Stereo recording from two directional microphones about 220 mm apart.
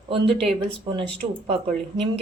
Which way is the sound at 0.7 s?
20° right (ahead or behind).